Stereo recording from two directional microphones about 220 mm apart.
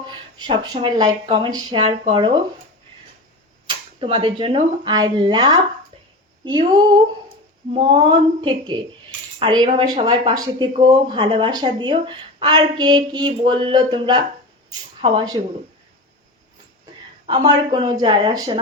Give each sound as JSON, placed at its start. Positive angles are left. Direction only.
{"t": 0.3, "sound": "speech", "side_deg": -20}
{"t": 3.7, "sound": "speech", "side_deg": -25}
{"t": 17.2, "sound": "speech", "side_deg": -20}